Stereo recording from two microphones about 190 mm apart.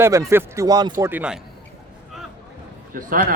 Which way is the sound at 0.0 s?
15° right (ahead or behind).